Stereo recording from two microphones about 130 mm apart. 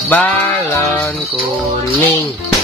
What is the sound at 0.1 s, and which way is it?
Music, 10° left (ahead or behind).